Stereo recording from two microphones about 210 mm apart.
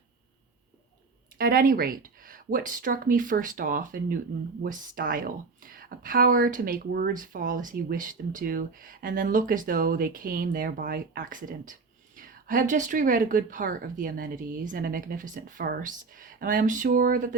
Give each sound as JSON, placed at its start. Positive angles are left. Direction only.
{"t": 1.4, "sound": "a woman's voice", "side_deg": -45}